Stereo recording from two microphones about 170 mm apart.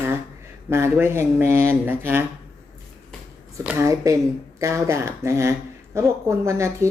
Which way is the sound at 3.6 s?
10° right (ahead or behind).